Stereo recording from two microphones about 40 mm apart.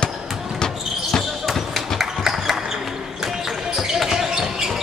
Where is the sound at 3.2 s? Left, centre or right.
Centre.